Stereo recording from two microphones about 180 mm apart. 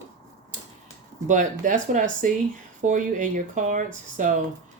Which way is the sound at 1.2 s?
45° right (ahead or behind).